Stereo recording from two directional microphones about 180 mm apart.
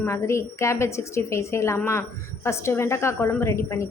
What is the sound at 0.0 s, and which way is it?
A woman's voice, 15° left (ahead or behind).